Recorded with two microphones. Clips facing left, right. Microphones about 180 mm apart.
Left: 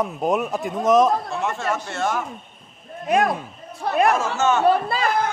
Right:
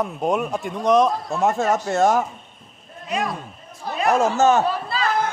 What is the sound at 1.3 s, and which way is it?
Speech, 40° right (ahead or behind).